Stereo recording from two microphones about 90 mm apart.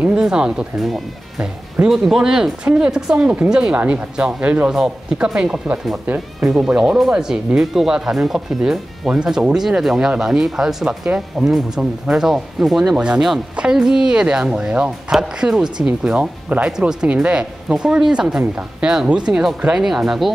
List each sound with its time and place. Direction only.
0.0 s speech: 10° right (ahead or behind)